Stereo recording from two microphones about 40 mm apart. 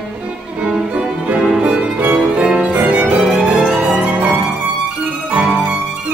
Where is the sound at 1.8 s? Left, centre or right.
Right.